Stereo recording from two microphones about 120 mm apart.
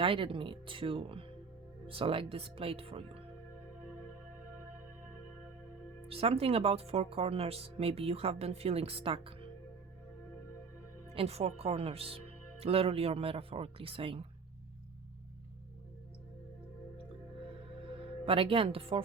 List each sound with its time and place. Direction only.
0.0 s speech: 50° right (ahead or behind)
6.1 s speech: 55° right (ahead or behind)
11.1 s speech: 55° right (ahead or behind)
18.3 s speech: 50° right (ahead or behind)